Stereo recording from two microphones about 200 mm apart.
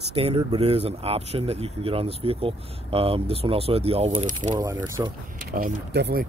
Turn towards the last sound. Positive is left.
turn(degrees=-55)  # may be behind; listen again after turning